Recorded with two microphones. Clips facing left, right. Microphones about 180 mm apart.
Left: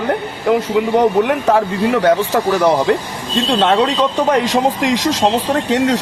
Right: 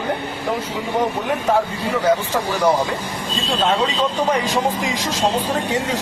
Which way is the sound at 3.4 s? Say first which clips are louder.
Left 6 dB; 90° left.